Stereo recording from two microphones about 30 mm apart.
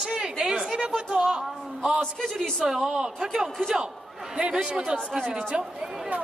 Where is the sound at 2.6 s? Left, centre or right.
Centre.